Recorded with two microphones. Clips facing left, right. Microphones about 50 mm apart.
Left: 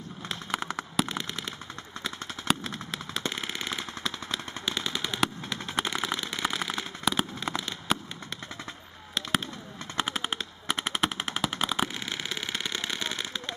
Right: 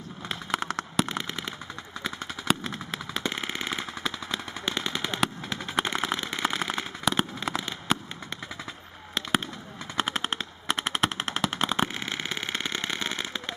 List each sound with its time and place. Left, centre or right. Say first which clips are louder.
0.3 s fireworks: right 3 dB; centre
2.0 s machine gun: right 2 dB; centre
9.9 s machine gun: right 2 dB; centre
12.1 s engine: right 2 dB; right